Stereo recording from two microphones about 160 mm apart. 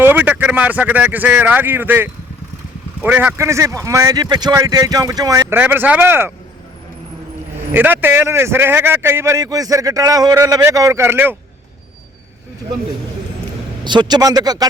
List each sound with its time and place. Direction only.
0.0 s speech: 10° right (ahead or behind)
7.7 s a man's voice: 10° right (ahead or behind)
13.8 s speech: 30° right (ahead or behind)